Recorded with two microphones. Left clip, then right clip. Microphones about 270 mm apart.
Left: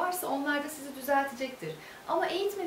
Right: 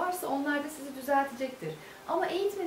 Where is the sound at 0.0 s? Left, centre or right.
Centre.